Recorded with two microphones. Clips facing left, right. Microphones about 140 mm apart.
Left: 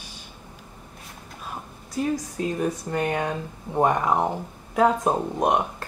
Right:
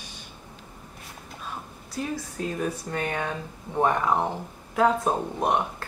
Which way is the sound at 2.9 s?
15° left (ahead or behind).